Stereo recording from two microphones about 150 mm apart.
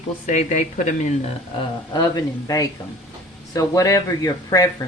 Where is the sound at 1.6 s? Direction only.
30° left (ahead or behind).